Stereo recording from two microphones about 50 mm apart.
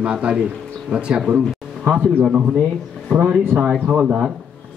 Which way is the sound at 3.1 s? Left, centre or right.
Centre.